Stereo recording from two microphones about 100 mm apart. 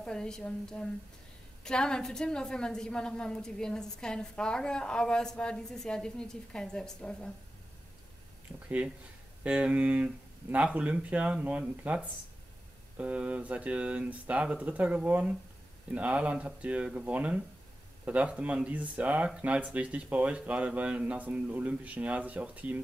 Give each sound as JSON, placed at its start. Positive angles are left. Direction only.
{"t": 0.0, "sound": "a woman's voice", "side_deg": 5}
{"t": 8.6, "sound": "speech", "side_deg": -15}